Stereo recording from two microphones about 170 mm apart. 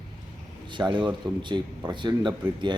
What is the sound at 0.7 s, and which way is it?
Speech, 25° right (ahead or behind).